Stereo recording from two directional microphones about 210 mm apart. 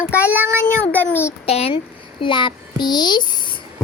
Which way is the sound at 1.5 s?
30° left (ahead or behind).